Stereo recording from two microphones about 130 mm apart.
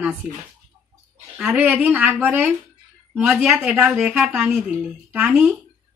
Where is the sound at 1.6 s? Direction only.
15° right (ahead or behind).